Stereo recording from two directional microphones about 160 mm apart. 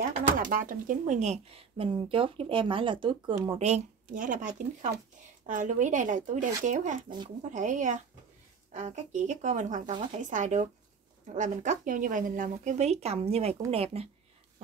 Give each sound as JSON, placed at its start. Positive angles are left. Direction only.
{"t": 0.4, "sound": "speech", "side_deg": -55}